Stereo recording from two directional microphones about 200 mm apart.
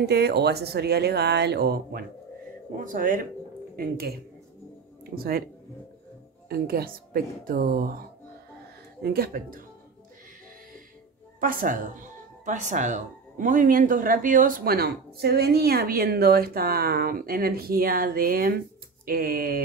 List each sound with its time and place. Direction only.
0.0 s a woman's voice: 55° right (ahead or behind)
6.5 s a woman's voice: 45° right (ahead or behind)
11.3 s a woman's voice: 45° right (ahead or behind)